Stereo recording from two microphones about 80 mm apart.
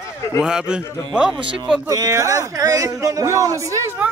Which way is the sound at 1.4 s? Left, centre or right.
Right.